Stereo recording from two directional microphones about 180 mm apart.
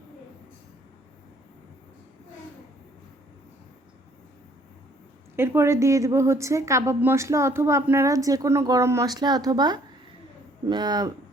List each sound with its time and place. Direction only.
5.4 s a woman's voice: 15° right (ahead or behind)